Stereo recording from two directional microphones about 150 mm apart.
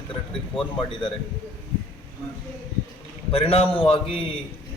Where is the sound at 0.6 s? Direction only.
35° left (ahead or behind).